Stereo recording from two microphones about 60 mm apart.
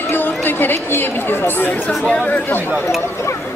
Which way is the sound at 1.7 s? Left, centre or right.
Left.